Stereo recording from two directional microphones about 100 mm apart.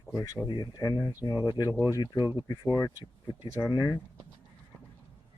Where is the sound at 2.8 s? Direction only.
30° left (ahead or behind).